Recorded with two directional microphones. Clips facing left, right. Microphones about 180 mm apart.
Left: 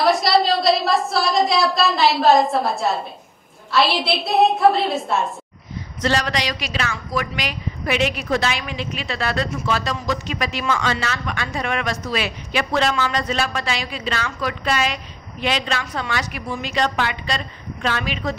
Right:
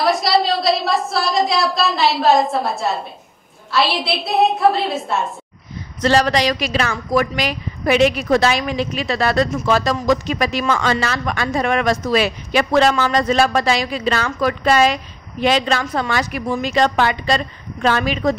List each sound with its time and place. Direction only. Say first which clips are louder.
0.0 s a woman's voice: even; centre (ahead or behind)
6.0 s a woman's voice: right 6 dB; 35° right (ahead or behind)